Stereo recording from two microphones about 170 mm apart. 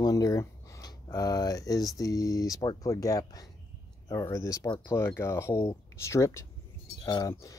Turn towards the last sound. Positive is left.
turn(degrees=20)  # may be behind; listen again after turning